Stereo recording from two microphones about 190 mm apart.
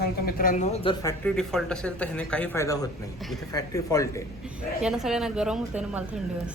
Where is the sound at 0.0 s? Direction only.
50° left (ahead or behind); by 0.9 s 30° left (ahead or behind).